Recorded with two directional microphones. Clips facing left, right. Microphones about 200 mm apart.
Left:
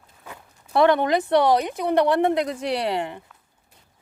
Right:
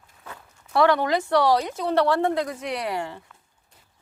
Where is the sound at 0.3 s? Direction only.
20° left (ahead or behind).